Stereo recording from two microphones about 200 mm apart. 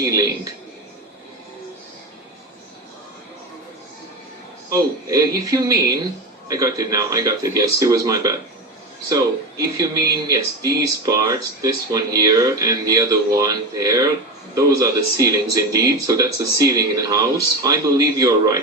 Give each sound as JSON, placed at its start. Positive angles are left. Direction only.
{"t": 0.0, "sound": "speech", "side_deg": -20}
{"t": 4.7, "sound": "speech", "side_deg": -15}